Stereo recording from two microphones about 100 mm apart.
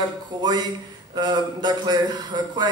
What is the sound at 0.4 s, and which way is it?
Speech, 40° right (ahead or behind).